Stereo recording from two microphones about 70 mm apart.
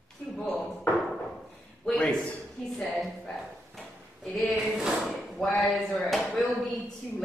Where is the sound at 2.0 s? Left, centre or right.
Centre.